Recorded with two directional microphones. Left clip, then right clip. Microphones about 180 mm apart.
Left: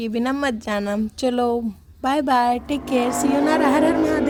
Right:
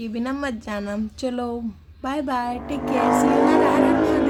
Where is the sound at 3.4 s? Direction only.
40° left (ahead or behind).